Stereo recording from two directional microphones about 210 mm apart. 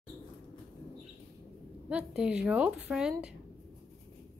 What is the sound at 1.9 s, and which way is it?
A woman's voice, 5° right (ahead or behind).